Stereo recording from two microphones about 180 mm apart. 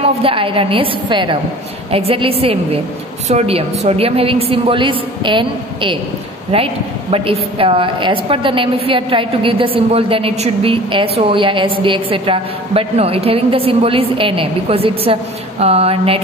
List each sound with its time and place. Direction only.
0.0 s a woman's voice: 30° right (ahead or behind)